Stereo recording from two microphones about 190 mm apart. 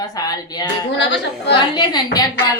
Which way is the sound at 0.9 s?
70° left (ahead or behind).